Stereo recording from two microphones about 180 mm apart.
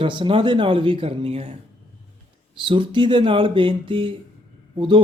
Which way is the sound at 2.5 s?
30° right (ahead or behind).